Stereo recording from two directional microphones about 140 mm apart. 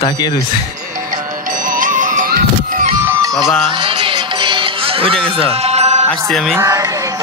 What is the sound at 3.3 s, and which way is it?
Speech, centre (ahead or behind).